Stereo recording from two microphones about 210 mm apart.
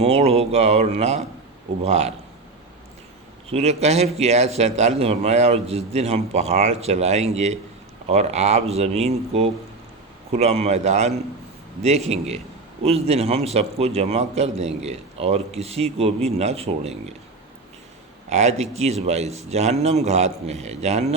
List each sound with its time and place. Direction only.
0.0 s a man's voice: 30° right (ahead or behind)
3.5 s a man's voice: 30° right (ahead or behind)
18.3 s speech: 30° right (ahead or behind)